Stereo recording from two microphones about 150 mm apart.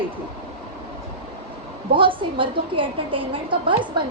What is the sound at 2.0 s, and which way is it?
A woman's voice, 35° right (ahead or behind).